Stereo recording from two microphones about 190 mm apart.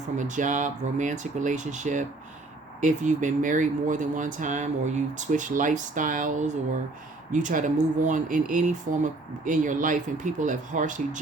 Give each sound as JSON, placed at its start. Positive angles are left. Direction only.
{"t": 0.2, "sound": "speech", "side_deg": -40}